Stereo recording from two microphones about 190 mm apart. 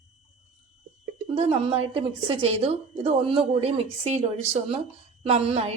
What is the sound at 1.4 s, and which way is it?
A woman's voice, 30° right (ahead or behind).